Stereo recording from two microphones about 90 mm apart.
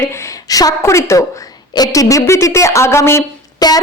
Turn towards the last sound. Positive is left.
turn(degrees=50)  # may be behind; listen again after turning